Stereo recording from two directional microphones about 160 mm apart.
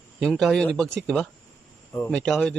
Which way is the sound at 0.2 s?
Centre (ahead or behind).